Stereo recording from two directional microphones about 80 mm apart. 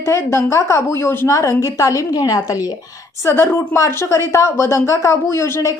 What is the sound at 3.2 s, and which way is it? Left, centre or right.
A woman's voice, left.